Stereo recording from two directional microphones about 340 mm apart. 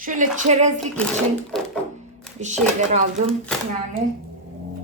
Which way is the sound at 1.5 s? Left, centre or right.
Centre.